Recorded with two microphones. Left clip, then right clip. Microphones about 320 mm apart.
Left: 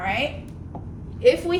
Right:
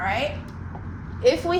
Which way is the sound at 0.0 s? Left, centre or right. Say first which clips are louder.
Even; centre.